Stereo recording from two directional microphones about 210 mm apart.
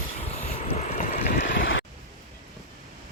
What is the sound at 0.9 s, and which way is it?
Vehicle, 40° left (ahead or behind).